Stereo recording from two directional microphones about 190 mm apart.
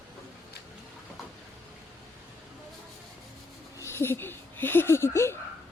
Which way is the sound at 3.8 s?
15° left (ahead or behind).